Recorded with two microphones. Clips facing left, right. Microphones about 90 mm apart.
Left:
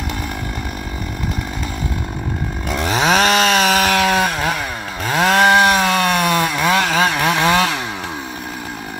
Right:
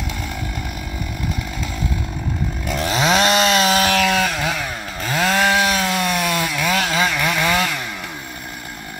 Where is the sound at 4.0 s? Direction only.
45° left (ahead or behind).